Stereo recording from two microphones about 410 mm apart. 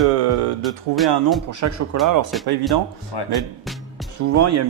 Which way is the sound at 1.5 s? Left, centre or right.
Right.